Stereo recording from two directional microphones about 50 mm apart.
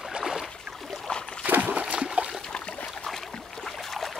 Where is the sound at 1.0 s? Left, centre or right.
Centre.